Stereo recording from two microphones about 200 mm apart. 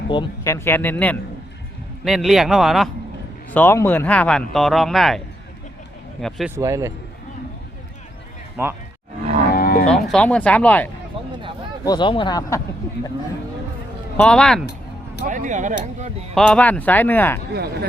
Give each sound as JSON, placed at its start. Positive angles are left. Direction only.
{"t": 0.1, "sound": "speech", "side_deg": 20}
{"t": 3.5, "sound": "speech", "side_deg": 10}
{"t": 6.2, "sound": "speech", "side_deg": 0}
{"t": 6.6, "sound": "a man's voice", "side_deg": -15}
{"t": 8.6, "sound": "a man's voice", "side_deg": -10}
{"t": 9.6, "sound": "moo", "side_deg": 45}
{"t": 9.8, "sound": "speech", "side_deg": 5}
{"t": 11.9, "sound": "speech", "side_deg": 25}
{"t": 14.2, "sound": "speech", "side_deg": 5}
{"t": 15.2, "sound": "speech", "side_deg": -40}
{"t": 16.3, "sound": "speech", "side_deg": 5}